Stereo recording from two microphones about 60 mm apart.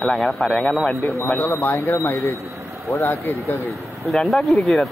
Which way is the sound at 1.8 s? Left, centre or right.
Left.